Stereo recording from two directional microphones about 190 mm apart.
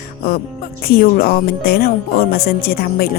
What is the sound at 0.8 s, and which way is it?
Speech, 50° left (ahead or behind).